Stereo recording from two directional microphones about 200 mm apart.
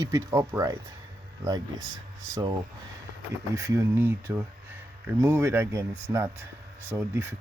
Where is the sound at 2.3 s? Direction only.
20° right (ahead or behind).